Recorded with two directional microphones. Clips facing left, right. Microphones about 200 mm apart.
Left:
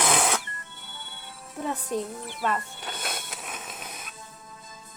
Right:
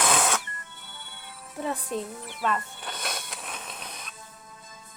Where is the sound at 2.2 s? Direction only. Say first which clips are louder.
Even; 35° left (ahead or behind).